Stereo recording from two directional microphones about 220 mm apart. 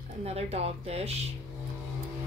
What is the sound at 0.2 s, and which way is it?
A woman's voice, 30° right (ahead or behind).